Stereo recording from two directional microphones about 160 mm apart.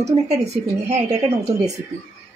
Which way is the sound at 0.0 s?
45° right (ahead or behind).